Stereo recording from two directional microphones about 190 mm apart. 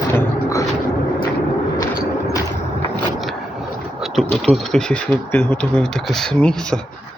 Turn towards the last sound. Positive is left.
turn(degrees=5)  # may be behind; listen again after turning